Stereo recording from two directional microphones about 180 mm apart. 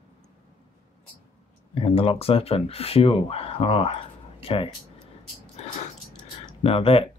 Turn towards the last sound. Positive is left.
turn(degrees=30)  # may be behind; listen again after turning